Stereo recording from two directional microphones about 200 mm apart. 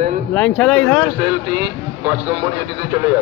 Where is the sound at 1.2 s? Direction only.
25° right (ahead or behind).